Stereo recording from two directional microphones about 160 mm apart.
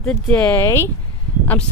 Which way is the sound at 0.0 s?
5° left (ahead or behind).